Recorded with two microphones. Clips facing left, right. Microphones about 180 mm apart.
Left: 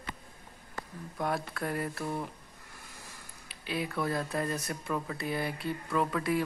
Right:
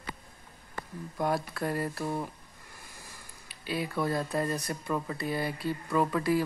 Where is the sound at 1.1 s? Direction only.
Centre (ahead or behind).